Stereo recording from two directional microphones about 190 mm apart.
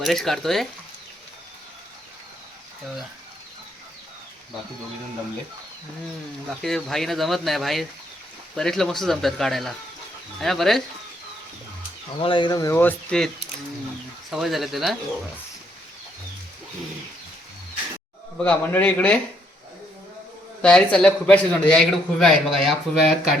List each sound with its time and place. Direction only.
0.0 s a man's voice: centre (ahead or behind)
6.6 s a man's voice: centre (ahead or behind)
12.2 s a man's voice: 25° left (ahead or behind); by 14.9 s centre (ahead or behind)
18.4 s speech: 10° left (ahead or behind)
20.6 s a man's voice: 5° left (ahead or behind)